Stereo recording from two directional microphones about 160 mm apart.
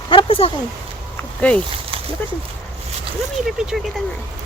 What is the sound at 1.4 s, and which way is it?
Speech, 10° left (ahead or behind).